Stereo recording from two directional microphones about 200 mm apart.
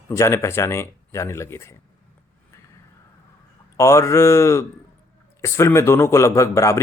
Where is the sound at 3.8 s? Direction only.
15° left (ahead or behind).